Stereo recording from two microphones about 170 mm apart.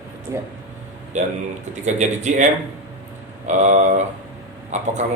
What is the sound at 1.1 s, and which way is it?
Speech, 45° right (ahead or behind).